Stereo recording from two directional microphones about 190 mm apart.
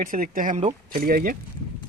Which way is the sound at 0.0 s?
45° right (ahead or behind).